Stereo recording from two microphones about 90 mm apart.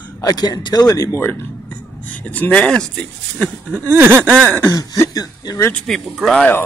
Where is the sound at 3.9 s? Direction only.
25° right (ahead or behind).